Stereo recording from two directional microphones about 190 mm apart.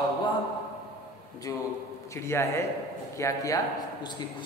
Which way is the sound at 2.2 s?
15° left (ahead or behind).